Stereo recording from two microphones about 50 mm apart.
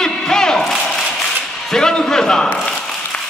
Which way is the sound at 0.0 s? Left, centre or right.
Centre.